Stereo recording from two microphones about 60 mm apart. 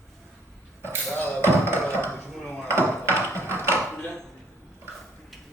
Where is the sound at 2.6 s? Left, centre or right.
Right.